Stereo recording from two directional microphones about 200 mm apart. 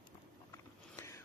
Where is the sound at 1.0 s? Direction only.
15° left (ahead or behind).